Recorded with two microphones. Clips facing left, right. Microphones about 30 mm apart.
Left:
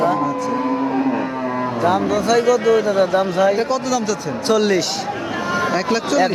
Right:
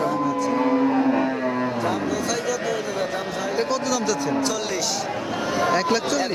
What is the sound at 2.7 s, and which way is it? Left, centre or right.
Speech, left.